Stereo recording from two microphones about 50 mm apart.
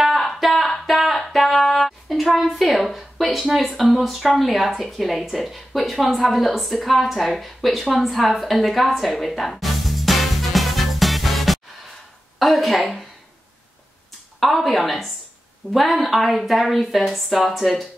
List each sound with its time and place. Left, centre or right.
0.1 s a sound: centre
3.9 s a woman's voice: centre
14.4 s a woman's voice: centre